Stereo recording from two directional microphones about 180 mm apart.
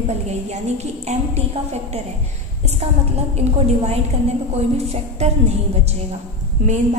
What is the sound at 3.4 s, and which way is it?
A woman's voice, 35° right (ahead or behind).